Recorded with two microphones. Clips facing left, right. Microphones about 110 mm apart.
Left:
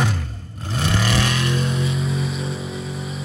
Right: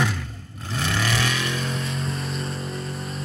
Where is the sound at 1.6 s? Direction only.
5° left (ahead or behind).